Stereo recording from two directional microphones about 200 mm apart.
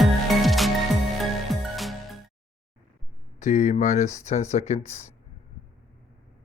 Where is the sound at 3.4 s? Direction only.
35° left (ahead or behind).